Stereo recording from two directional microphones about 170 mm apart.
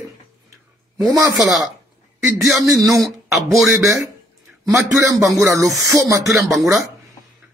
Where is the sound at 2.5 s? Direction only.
Centre (ahead or behind).